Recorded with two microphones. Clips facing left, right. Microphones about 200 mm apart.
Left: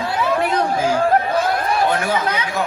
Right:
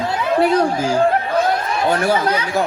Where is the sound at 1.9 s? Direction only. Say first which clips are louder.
Right 3 dB; 40° right (ahead or behind).